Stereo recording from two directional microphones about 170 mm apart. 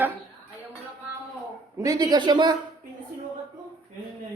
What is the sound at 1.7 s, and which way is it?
Speech, 20° right (ahead or behind).